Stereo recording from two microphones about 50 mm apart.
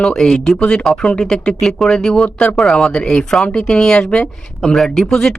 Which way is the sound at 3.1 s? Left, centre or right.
Centre.